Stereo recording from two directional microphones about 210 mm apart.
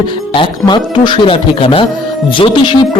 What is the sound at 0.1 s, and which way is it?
A man's voice, 25° left (ahead or behind).